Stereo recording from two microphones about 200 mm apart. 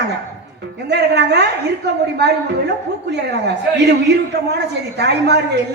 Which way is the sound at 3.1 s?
55° right (ahead or behind).